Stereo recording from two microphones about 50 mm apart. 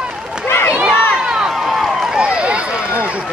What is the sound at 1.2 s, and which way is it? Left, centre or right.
Run, centre.